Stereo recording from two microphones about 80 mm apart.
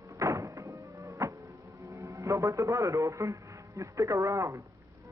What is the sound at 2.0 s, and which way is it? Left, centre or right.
A man's voice, right.